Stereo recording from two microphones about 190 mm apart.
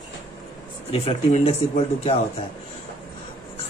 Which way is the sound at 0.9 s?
30° left (ahead or behind).